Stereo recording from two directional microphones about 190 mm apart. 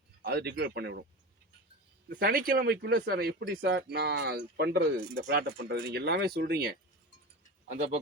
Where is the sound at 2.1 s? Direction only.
50° right (ahead or behind).